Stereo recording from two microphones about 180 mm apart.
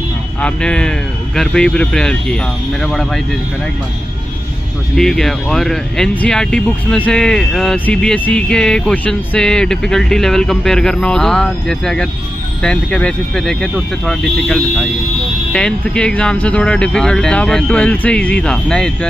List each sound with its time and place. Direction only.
0.4 s speech: 5° left (ahead or behind)
4.9 s speech: centre (ahead or behind)